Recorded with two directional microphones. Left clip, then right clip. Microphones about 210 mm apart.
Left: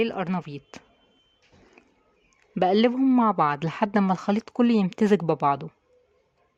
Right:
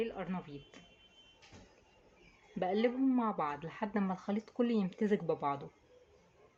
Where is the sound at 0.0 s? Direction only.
55° left (ahead or behind).